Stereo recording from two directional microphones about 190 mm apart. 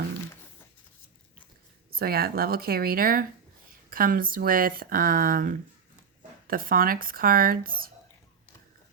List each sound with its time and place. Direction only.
1.9 s speech: 55° right (ahead or behind)